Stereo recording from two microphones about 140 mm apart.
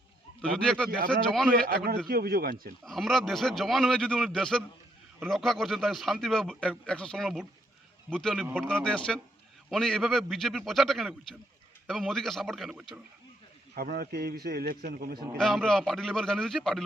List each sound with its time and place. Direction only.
0.5 s speech: 5° left (ahead or behind)
2.0 s a man's voice: 90° right
2.8 s speech: centre (ahead or behind)
13.7 s a man's voice: 90° right
15.4 s speech: centre (ahead or behind)